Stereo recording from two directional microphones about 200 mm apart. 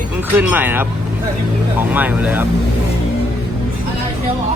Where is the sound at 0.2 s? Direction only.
10° right (ahead or behind).